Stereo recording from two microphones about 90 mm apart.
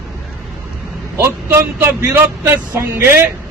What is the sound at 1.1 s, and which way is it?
Speech, 30° right (ahead or behind).